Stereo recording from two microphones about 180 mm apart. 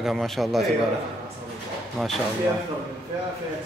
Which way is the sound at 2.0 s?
Centre (ahead or behind).